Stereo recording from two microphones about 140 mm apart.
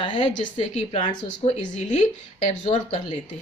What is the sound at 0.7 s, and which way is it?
Speech, 50° left (ahead or behind).